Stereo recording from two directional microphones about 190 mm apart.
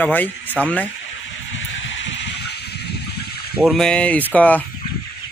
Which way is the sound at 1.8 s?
75° left (ahead or behind).